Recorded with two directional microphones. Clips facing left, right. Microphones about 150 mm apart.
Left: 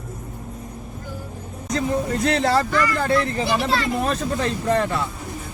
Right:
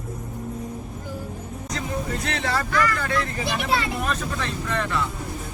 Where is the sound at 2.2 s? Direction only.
35° left (ahead or behind).